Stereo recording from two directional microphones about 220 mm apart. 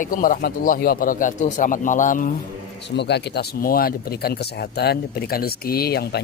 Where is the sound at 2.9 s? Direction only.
50° left (ahead or behind).